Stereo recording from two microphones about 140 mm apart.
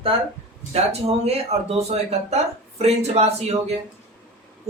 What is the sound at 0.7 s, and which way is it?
Speech, 50° right (ahead or behind).